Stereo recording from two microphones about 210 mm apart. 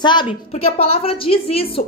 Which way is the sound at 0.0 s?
20° left (ahead or behind).